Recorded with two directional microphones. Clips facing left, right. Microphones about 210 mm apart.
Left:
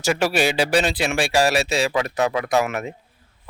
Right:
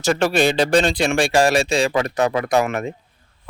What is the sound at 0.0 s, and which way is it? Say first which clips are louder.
Speech: right 3 dB; 10° left (ahead or behind).